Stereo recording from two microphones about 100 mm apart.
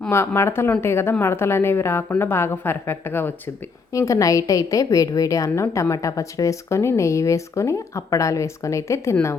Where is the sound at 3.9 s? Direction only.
30° left (ahead or behind).